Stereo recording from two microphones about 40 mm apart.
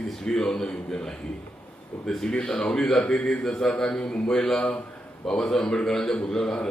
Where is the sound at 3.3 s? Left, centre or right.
Centre.